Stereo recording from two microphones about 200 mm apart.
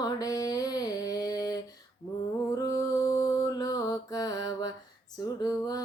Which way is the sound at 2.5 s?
15° left (ahead or behind).